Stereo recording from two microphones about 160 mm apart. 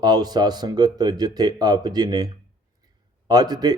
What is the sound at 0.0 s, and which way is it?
Speech, 25° right (ahead or behind).